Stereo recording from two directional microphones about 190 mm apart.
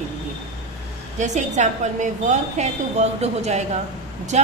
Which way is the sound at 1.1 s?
40° right (ahead or behind).